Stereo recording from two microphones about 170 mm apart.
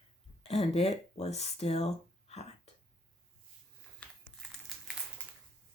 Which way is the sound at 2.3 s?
40° left (ahead or behind).